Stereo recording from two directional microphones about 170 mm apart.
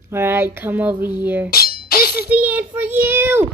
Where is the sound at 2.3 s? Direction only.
10° right (ahead or behind).